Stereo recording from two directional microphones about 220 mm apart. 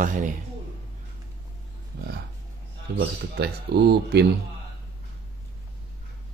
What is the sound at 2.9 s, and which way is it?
Speech, 45° right (ahead or behind).